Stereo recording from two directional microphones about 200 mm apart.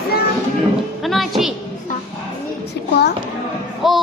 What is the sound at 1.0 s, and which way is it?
Speech, centre (ahead or behind).